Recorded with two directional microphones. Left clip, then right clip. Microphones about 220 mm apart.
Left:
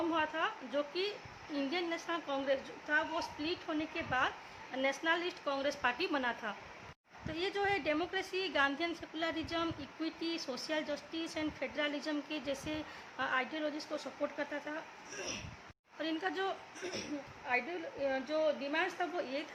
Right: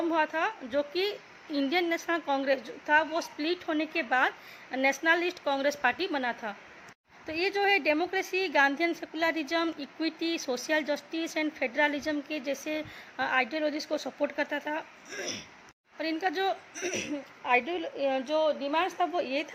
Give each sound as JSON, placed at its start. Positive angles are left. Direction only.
{"t": 0.1, "sound": "a woman's voice", "side_deg": -25}
{"t": 17.4, "sound": "a woman's voice", "side_deg": -40}
{"t": 18.1, "sound": "a woman's voice", "side_deg": -25}